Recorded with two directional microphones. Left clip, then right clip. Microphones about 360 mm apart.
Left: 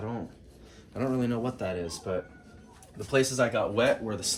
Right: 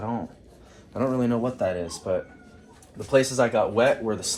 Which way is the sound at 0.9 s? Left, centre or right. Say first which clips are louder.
Right 5 dB; centre.